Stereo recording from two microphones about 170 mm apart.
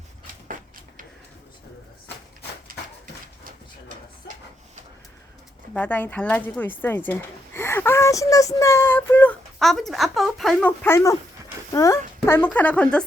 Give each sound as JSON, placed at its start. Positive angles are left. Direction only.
{"t": 5.7, "sound": "speech", "side_deg": 10}